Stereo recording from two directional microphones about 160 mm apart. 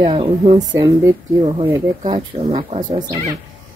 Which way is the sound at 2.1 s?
35° right (ahead or behind).